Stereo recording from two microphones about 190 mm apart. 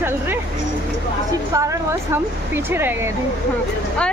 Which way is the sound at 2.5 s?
10° right (ahead or behind).